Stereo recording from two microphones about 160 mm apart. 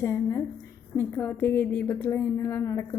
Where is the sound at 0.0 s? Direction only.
20° left (ahead or behind).